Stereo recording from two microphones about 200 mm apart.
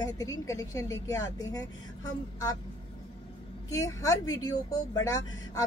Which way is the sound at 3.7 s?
15° left (ahead or behind).